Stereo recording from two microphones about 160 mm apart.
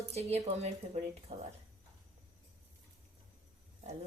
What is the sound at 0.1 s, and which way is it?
Speech, 40° right (ahead or behind).